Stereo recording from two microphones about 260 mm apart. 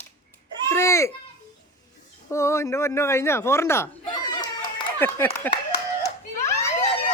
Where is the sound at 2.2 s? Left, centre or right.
Centre.